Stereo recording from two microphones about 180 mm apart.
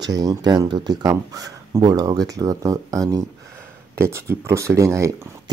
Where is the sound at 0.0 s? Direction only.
20° right (ahead or behind).